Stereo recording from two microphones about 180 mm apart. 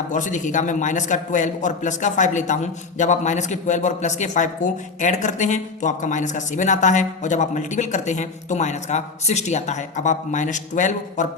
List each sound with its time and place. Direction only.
0.1 s a man's voice: 45° left (ahead or behind)